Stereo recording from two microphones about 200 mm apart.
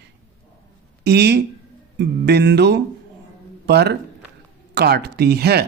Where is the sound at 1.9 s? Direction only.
55° right (ahead or behind).